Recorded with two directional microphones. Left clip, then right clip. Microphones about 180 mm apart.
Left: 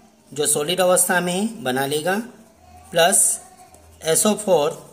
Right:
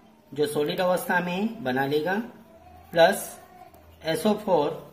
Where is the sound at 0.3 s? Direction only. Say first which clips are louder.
Left 3 dB; 30° left (ahead or behind).